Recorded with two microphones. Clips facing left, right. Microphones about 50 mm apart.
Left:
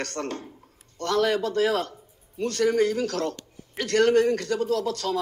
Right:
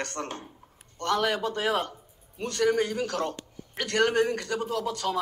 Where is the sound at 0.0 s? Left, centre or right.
Centre.